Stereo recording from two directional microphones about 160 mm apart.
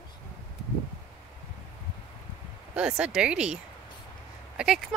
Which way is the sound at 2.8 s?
5° right (ahead or behind).